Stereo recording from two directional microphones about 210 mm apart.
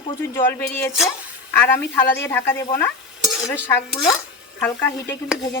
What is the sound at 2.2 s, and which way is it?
Speech, 10° left (ahead or behind).